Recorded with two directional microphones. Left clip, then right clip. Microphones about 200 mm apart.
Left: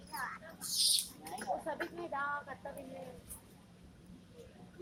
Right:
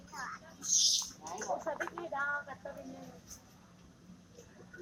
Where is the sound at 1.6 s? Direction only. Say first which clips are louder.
Right 2 dB; 35° left (ahead or behind).